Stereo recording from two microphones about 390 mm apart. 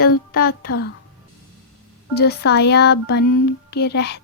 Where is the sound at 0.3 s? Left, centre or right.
Left.